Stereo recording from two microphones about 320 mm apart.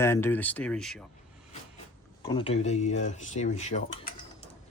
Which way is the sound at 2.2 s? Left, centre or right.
Centre.